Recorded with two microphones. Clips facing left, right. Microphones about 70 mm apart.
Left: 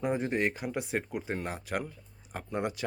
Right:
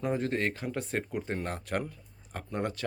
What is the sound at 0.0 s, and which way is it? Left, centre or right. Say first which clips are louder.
Speech: left 1 dB; centre.